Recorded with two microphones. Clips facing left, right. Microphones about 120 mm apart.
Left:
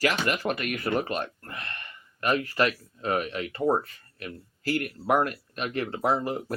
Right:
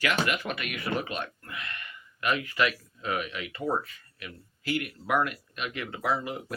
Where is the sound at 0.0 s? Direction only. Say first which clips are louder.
Left 2 dB; 35° left (ahead or behind).